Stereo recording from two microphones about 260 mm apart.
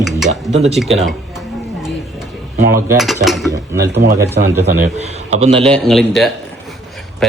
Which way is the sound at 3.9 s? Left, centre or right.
Right.